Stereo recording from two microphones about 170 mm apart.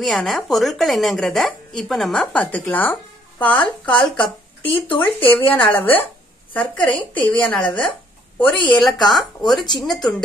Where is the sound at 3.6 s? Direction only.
30° left (ahead or behind).